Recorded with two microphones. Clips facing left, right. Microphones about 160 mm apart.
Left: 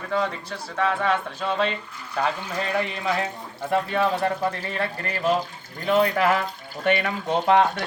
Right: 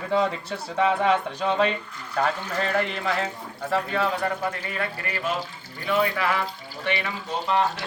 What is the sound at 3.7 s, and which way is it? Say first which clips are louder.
Speech: left 2 dB; 20° left (ahead or behind).